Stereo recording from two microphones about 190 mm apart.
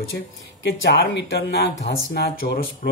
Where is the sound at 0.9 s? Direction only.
65° left (ahead or behind).